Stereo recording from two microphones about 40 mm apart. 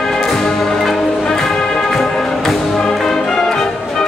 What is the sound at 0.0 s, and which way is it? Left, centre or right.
Music, centre.